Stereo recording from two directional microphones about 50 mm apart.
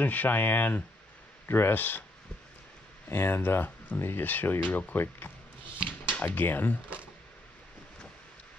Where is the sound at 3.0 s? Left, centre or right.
Left.